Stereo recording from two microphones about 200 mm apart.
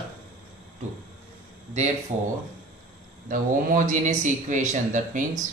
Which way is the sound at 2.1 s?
30° right (ahead or behind).